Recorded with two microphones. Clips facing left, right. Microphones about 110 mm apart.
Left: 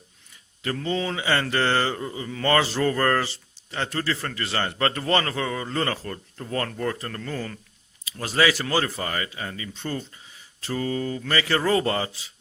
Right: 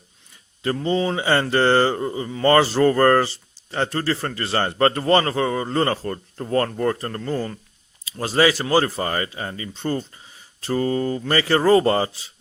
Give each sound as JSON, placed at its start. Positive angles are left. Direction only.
{"t": 0.6, "sound": "speech", "side_deg": -30}